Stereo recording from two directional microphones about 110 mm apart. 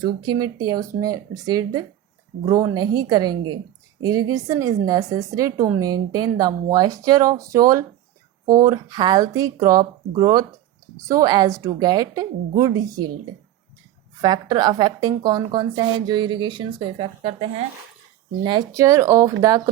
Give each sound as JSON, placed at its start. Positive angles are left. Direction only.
{"t": 0.0, "sound": "a woman's voice", "side_deg": -40}
{"t": 11.1, "sound": "a woman's voice", "side_deg": -35}
{"t": 14.2, "sound": "a woman's voice", "side_deg": -40}
{"t": 18.7, "sound": "speech", "side_deg": -30}